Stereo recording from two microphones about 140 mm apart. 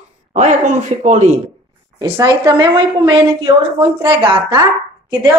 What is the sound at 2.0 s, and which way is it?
A woman's voice, 25° right (ahead or behind).